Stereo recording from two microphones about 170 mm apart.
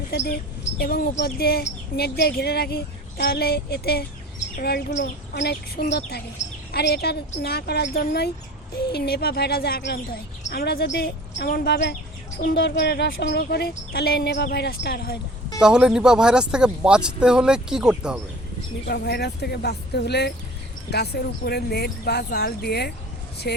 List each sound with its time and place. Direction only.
0.1 s a woman's voice: 65° left (ahead or behind)
12.4 s speech: 60° left (ahead or behind)
15.6 s speech: 5° right (ahead or behind)
18.9 s speech: 75° left (ahead or behind)